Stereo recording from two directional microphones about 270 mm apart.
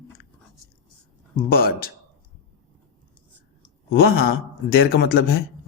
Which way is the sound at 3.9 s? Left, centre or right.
Left.